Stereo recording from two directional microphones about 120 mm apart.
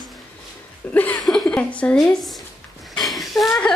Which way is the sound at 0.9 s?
15° left (ahead or behind).